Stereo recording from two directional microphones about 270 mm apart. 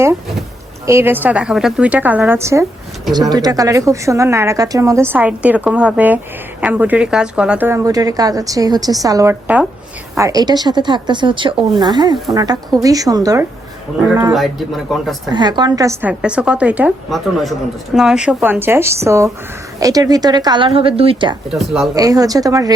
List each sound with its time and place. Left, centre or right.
0.0 s speech: centre
15.3 s a woman's voice: centre
21.5 s a woman's voice: centre
21.9 s speech: centre